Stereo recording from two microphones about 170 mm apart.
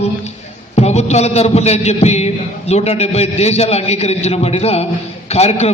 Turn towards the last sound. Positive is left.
turn(degrees=40)  # may be behind; listen again after turning